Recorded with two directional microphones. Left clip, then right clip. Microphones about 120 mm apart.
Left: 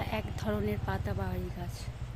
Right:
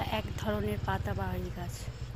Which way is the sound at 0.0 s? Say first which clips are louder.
Right 2 dB; 15° left (ahead or behind).